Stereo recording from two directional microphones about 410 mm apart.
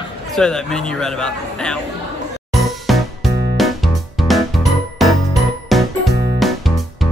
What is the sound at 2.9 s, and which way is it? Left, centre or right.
Music, centre.